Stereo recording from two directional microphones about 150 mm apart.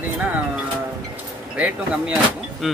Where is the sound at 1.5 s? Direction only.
10° right (ahead or behind).